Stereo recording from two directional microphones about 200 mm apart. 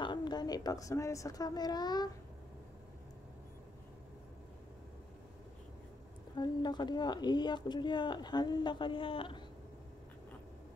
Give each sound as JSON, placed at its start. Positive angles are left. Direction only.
{"t": 0.0, "sound": "a woman's voice", "side_deg": 20}
{"t": 6.3, "sound": "a woman's voice", "side_deg": 20}